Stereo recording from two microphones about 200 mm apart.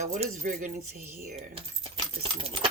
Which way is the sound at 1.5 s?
30° right (ahead or behind).